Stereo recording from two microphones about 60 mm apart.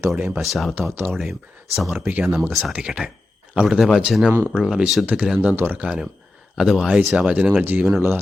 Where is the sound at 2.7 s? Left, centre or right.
Centre.